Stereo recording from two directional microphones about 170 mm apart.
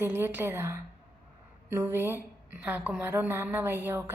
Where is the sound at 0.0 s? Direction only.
10° right (ahead or behind).